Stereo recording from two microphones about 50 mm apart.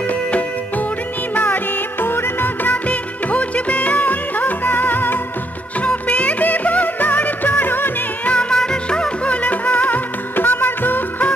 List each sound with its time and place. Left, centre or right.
0.1 s music: left
2.9 s music: left
5.8 s music: left
8.3 s music: left
8.5 s music: centre; by 11.2 s left